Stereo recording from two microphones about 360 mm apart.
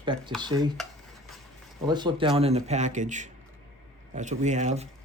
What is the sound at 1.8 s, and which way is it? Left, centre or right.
Speech, centre.